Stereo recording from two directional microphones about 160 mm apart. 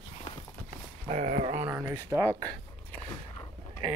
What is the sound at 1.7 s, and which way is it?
Speech, 15° right (ahead or behind).